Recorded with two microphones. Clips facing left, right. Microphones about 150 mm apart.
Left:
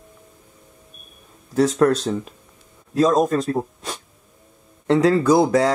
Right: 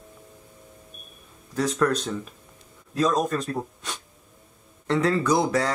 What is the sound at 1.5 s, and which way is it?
Speech, 30° left (ahead or behind).